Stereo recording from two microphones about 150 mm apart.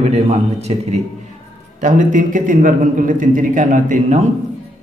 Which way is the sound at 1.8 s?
60° right (ahead or behind).